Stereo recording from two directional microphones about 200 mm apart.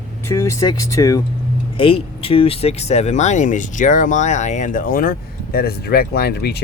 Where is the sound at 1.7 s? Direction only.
25° left (ahead or behind); by 6.6 s 55° left (ahead or behind).